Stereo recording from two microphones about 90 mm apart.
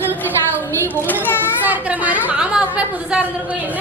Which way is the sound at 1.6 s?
20° right (ahead or behind).